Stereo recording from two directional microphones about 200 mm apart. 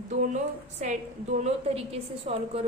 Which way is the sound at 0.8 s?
35° right (ahead or behind).